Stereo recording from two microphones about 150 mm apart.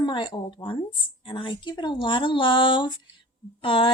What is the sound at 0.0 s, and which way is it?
Speech, 30° left (ahead or behind).